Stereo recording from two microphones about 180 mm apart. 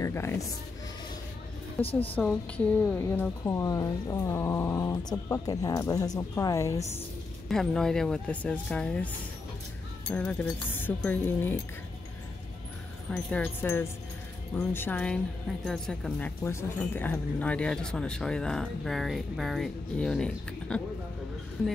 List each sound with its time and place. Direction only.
0.0 s speech: 15° left (ahead or behind)
1.9 s a woman's voice: 30° left (ahead or behind)
2.1 s a woman's voice: 10° left (ahead or behind)
7.4 s a woman's voice: centre (ahead or behind)
13.1 s a woman's voice: 10° left (ahead or behind)